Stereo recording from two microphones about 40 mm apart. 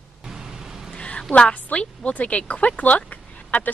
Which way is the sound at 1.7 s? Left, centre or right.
Left.